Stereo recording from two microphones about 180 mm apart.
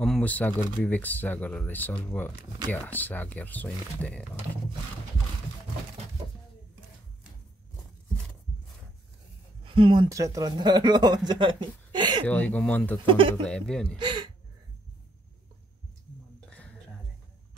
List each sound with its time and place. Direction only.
0.0 s speech: 5° left (ahead or behind)
9.7 s speech: 30° right (ahead or behind)
10.0 s speech: 20° right (ahead or behind)
12.3 s speech: 10° left (ahead or behind)
13.0 s speech: 30° right (ahead or behind)
13.4 s speech: 5° left (ahead or behind)
13.9 s speech: 25° right (ahead or behind)
16.4 s whispering: 5° left (ahead or behind)